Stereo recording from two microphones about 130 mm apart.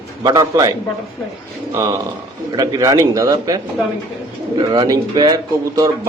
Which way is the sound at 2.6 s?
25° right (ahead or behind).